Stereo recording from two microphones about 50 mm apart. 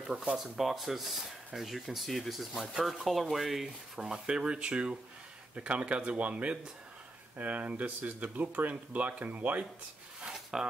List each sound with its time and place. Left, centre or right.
0.0 s speech: centre
0.4 s speech: centre; by 9.7 s right
10.3 s a sound: centre